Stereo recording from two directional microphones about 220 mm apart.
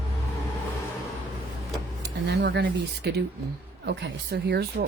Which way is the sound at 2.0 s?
50° right (ahead or behind).